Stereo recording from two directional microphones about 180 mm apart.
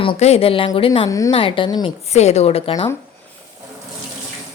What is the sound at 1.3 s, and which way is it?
Speech, 30° left (ahead or behind).